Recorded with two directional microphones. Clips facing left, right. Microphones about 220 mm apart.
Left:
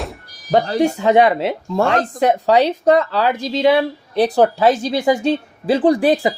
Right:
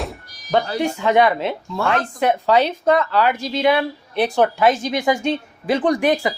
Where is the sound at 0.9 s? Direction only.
35° left (ahead or behind).